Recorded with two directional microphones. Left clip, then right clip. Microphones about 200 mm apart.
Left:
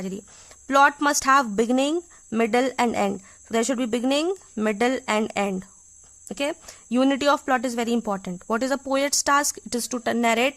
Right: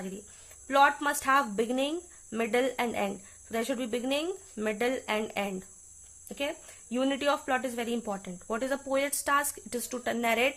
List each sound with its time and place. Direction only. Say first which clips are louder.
0.7 s speech: left 6 dB; 40° left (ahead or behind)